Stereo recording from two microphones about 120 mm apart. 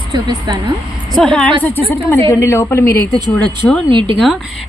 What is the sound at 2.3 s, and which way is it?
Speech, 25° left (ahead or behind).